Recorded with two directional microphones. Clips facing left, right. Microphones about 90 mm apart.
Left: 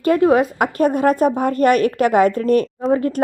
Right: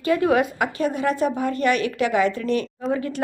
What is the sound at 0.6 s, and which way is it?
A woman's voice, 50° left (ahead or behind).